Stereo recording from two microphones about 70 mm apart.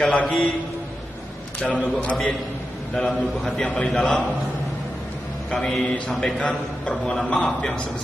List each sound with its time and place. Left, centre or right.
0.0 s a man's voice: centre
1.6 s a man's voice: centre
5.5 s a man's voice: centre